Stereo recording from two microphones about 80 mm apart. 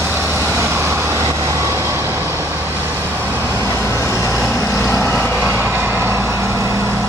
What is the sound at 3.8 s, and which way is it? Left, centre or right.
Vehicle, left.